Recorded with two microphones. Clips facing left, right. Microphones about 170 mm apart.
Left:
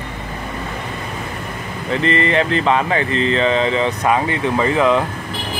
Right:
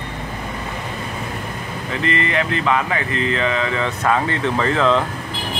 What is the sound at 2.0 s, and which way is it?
Speech, 30° left (ahead or behind).